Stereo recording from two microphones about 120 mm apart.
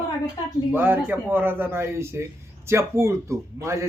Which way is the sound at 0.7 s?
15° right (ahead or behind).